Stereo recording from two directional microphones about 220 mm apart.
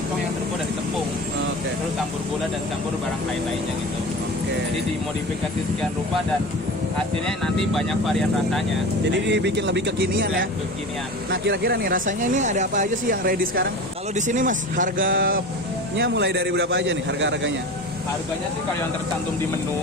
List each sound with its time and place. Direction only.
7.3 s speech: centre (ahead or behind)
9.1 s a man's voice: 50° right (ahead or behind)
16.0 s a man's voice: 55° right (ahead or behind)